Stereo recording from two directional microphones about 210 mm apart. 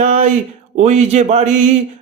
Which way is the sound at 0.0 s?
35° right (ahead or behind).